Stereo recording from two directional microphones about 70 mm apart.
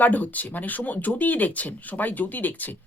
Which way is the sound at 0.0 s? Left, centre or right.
Left.